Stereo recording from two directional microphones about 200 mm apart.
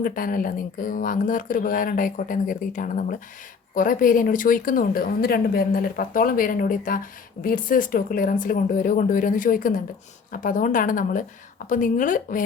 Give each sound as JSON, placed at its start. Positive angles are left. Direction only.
{"t": 0.0, "sound": "a woman's voice", "side_deg": 45}